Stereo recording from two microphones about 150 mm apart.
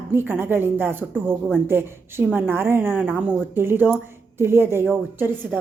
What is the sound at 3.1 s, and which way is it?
A woman's voice, 10° right (ahead or behind).